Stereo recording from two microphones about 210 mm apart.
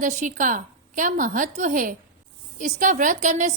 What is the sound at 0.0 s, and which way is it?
A woman's voice, 35° right (ahead or behind).